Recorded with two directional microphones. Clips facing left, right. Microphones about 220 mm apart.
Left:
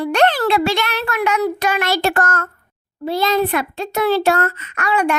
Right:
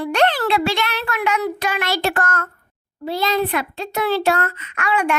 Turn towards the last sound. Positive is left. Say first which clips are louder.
# left 2 dB
turn(degrees=40)  # may be behind; listen again after turning